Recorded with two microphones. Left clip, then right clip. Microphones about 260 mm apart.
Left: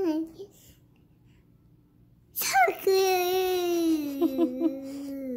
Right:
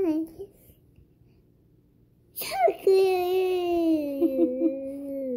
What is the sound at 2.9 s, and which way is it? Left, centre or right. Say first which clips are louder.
Baby cry: right 2 dB; left.